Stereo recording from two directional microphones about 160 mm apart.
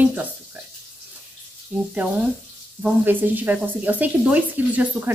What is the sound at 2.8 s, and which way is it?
Speech, 10° right (ahead or behind).